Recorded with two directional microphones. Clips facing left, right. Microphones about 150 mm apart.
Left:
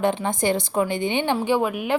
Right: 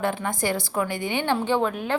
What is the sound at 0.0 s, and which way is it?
A woman's voice, 20° left (ahead or behind).